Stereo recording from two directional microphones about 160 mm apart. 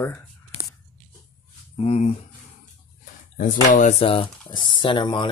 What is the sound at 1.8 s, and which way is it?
Speech, 40° left (ahead or behind).